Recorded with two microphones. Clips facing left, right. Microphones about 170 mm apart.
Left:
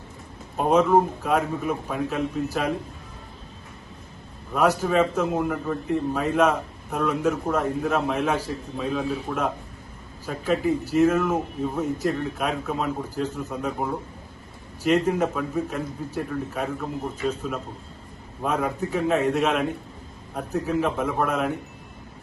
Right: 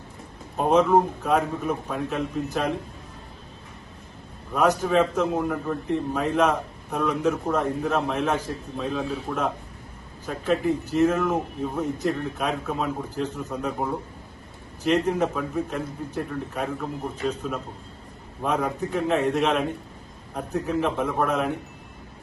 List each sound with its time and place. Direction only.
0.5 s a man's voice: 5° left (ahead or behind)
4.5 s a man's voice: 5° left (ahead or behind)